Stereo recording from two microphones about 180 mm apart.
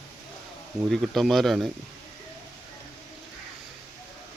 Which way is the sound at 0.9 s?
Centre (ahead or behind).